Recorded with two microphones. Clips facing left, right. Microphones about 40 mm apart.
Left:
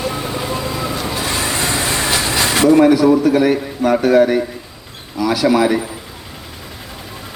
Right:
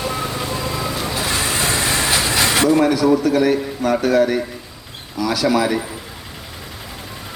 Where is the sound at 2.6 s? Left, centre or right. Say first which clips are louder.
Left 6 dB; centre.